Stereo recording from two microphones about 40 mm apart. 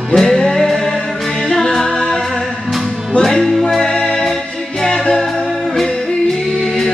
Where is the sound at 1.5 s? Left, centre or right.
Centre.